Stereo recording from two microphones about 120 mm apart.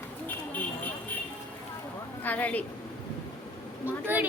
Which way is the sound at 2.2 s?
10° left (ahead or behind).